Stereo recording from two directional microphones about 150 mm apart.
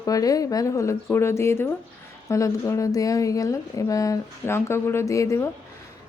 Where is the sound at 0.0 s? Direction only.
25° left (ahead or behind).